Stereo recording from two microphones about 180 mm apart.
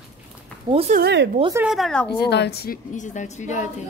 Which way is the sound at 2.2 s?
65° left (ahead or behind).